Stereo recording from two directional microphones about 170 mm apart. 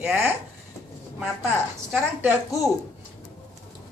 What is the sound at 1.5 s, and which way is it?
A woman's voice, 10° right (ahead or behind).